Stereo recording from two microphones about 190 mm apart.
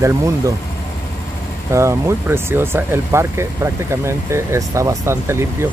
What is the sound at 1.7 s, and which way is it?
Speech, 15° right (ahead or behind).